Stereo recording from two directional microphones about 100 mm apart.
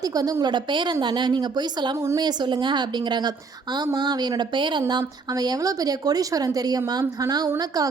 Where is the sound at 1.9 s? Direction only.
30° right (ahead or behind).